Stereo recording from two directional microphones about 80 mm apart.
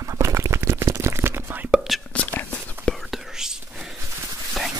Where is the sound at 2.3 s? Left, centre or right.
Left.